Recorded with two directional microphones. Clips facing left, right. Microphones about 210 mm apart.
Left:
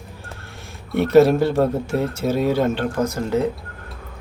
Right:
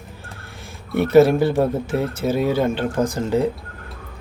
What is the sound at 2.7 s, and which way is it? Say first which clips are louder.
Speech: even; 15° right (ahead or behind).